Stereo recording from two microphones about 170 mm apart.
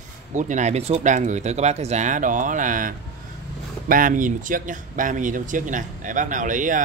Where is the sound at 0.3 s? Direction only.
45° right (ahead or behind).